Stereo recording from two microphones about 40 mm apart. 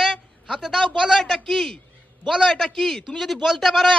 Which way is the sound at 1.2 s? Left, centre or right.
Centre.